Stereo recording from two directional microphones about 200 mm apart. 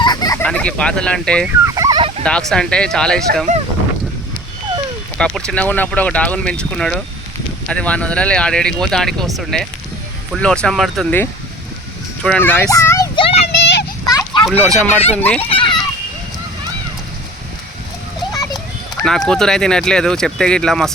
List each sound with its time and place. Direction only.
0.0 s a sound: 20° left (ahead or behind)
0.4 s speech: 5° left (ahead or behind)
1.6 s fowl: 15° right (ahead or behind)
2.5 s speech: 5° left (ahead or behind)
5.1 s speech: 5° left (ahead or behind)
13.1 s child singing: 25° left (ahead or behind)
13.6 s children playing: 60° left (ahead or behind)
14.1 s a sound: 15° left (ahead or behind)
14.6 s speech: 10° left (ahead or behind)
15.4 s children playing: 25° left (ahead or behind)
19.0 s speech: 5° left (ahead or behind)